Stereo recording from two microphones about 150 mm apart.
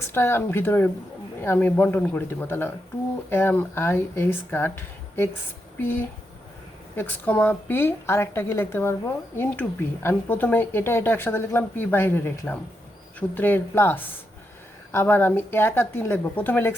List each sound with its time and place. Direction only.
0.1 s a woman's voice: 15° left (ahead or behind)